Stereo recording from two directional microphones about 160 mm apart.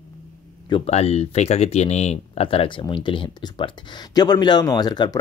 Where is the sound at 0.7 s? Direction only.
40° left (ahead or behind); by 5.2 s 25° left (ahead or behind).